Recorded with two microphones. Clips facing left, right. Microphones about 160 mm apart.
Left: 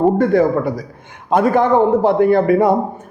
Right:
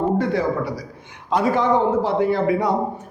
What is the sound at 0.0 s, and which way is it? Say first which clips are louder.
A man's voice: left 7 dB; 50° left (ahead or behind).